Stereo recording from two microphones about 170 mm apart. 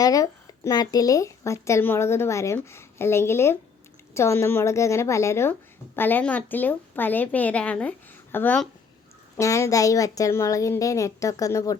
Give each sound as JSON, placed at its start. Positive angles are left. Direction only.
{"t": 0.0, "sound": "a woman's voice", "side_deg": 20}